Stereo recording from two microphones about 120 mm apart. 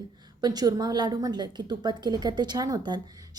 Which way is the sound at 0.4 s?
35° right (ahead or behind).